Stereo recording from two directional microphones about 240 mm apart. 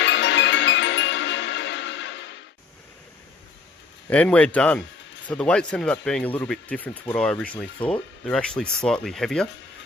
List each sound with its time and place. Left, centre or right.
0.0 s music: left
4.1 s speech: centre